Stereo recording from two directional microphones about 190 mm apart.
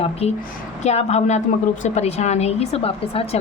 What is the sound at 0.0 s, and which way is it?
A woman's voice, 35° left (ahead or behind).